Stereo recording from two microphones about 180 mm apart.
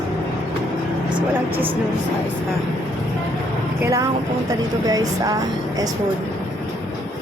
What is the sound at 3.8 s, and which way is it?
Speech, 15° right (ahead or behind).